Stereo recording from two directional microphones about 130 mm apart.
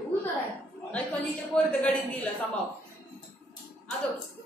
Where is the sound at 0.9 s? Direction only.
5° left (ahead or behind).